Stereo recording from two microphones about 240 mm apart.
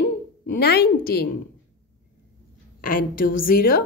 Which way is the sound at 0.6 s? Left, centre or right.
Left.